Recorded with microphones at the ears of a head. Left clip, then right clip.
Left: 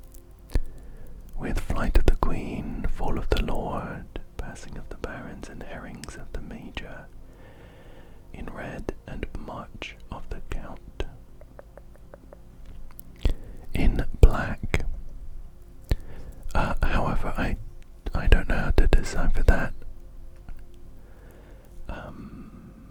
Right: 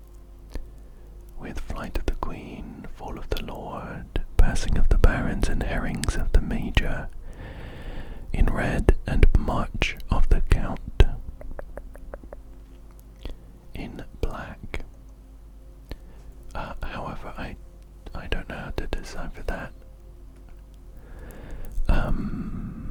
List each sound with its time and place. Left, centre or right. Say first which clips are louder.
1.4 s whispering: left 5 dB; left
4.1 s whispering: right 9 dB; right
13.7 s whispering: left 8 dB; left
15.9 s whispering: left 8 dB; left
21.2 s a sound: right 8 dB; right